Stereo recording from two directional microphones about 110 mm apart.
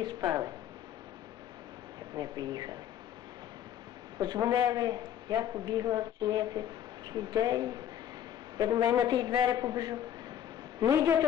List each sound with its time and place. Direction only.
0.0 s a man's voice: 40° right (ahead or behind)
2.1 s a man's voice: 40° right (ahead or behind)
4.2 s a man's voice: 35° right (ahead or behind)